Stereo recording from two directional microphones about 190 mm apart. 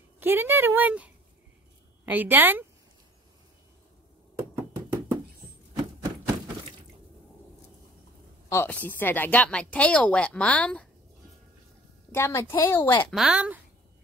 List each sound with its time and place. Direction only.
0.2 s a woman's voice: 10° right (ahead or behind)
4.4 s knock: 20° right (ahead or behind)
8.5 s speech: 10° left (ahead or behind)
12.1 s speech: 15° left (ahead or behind)
13.1 s a woman's voice: 5° right (ahead or behind)